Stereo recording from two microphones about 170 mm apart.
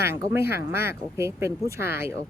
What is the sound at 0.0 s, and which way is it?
Speech, 15° right (ahead or behind).